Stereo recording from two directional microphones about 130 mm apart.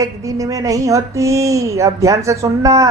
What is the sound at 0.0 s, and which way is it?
A woman's voice, 25° right (ahead or behind).